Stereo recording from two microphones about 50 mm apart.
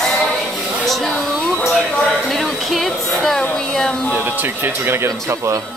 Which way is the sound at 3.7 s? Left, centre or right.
Centre.